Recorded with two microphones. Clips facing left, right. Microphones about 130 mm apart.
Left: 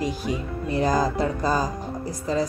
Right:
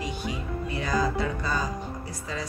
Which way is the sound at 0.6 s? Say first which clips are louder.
Left 6 dB; 40° left (ahead or behind).